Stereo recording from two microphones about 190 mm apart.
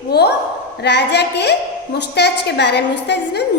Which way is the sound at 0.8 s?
65° left (ahead or behind).